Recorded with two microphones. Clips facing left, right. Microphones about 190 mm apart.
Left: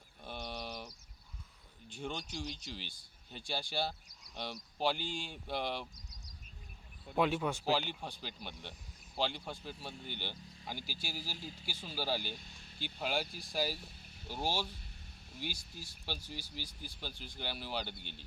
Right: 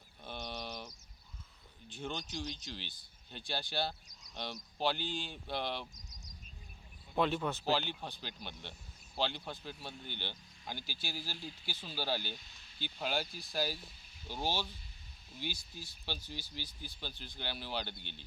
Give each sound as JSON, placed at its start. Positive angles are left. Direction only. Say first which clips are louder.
{"t": 0.3, "sound": "bird", "louder": "even", "side_deg": 5}
{"t": 1.9, "sound": "speech", "louder": "even", "side_deg": 5}
{"t": 5.9, "sound": "a sound", "louder": "even", "side_deg": -45}
{"t": 7.2, "sound": "speech", "louder": "left 1 dB", "side_deg": 10}